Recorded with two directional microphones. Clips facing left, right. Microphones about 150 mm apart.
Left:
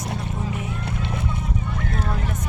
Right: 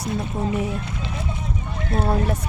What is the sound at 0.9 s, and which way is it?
Vehicle, 60° left (ahead or behind).